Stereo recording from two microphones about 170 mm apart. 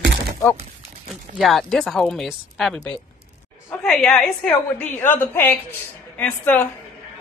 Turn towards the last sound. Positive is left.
turn(degrees=10)  # may be behind; listen again after turning